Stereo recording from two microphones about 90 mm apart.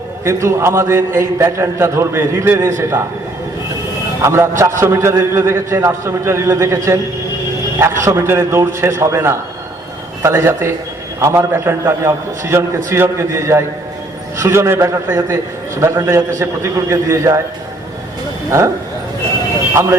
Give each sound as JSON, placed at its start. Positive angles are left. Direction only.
{"t": 0.3, "sound": "a man's voice", "side_deg": -35}
{"t": 4.2, "sound": "a man's voice", "side_deg": -30}
{"t": 19.7, "sound": "a man's voice", "side_deg": -30}